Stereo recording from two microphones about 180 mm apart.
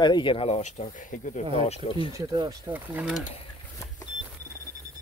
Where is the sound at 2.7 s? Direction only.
5° right (ahead or behind).